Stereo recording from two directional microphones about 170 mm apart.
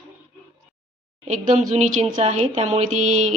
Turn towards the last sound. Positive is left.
turn(degrees=-45)  # may be behind; listen again after turning